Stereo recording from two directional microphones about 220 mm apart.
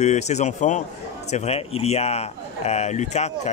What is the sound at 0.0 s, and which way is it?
Speech, 30° left (ahead or behind).